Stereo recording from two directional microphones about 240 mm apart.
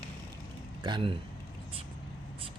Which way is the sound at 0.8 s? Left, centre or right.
Right.